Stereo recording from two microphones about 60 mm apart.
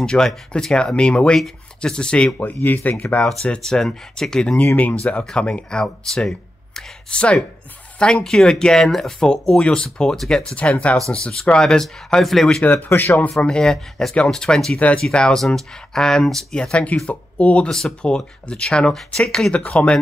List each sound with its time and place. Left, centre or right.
0.0 s speech: centre
2.3 s speech: left
3.4 s speech: centre
10.5 s speech: left; by 12.4 s centre
12.6 s speech: left
13.4 s speech: centre
14.8 s speech: left
15.0 s speech: centre
17.6 s speech: centre
18.0 s speech: centre
19.5 s speech: left